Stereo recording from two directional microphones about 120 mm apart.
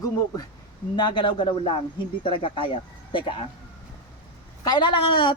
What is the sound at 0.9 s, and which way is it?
A woman's voice, 40° left (ahead or behind).